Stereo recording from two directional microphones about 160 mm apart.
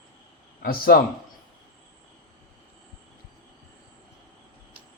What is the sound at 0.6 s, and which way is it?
Speech, 65° left (ahead or behind).